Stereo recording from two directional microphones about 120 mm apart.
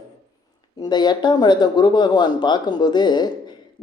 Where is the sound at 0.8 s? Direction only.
35° left (ahead or behind).